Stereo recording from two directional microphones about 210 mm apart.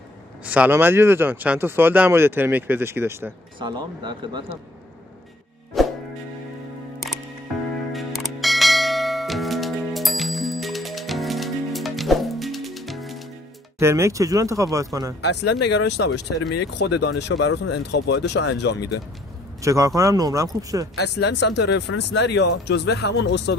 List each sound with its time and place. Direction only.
0.5 s speech: 10° right (ahead or behind)
3.5 s speech: 20° right (ahead or behind)
5.7 s music: centre (ahead or behind)
7.9 s church bell: centre (ahead or behind)
13.7 s speech: 15° right (ahead or behind)
15.6 s speech: 55° left (ahead or behind)
19.6 s speech: 15° right (ahead or behind)
21.0 s speech: 55° left (ahead or behind)